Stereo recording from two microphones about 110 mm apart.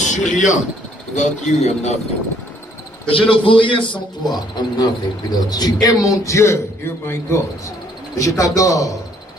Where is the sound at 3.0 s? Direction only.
55° left (ahead or behind); by 6.6 s 25° left (ahead or behind).